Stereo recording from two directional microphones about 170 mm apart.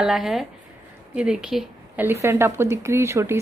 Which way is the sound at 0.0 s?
5° right (ahead or behind).